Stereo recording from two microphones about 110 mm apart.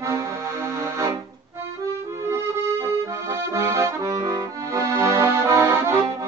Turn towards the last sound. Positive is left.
turn(degrees=-25)  # may be behind; listen again after turning